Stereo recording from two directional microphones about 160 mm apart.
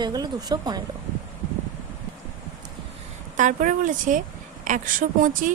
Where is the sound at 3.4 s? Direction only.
55° right (ahead or behind).